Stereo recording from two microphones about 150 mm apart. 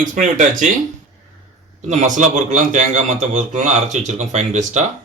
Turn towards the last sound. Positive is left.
turn(degrees=-50)  # may be behind; listen again after turning